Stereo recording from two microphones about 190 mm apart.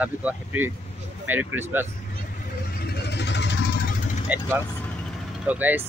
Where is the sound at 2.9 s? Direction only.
60° left (ahead or behind).